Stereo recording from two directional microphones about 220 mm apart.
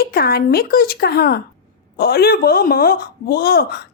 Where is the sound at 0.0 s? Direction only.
45° left (ahead or behind).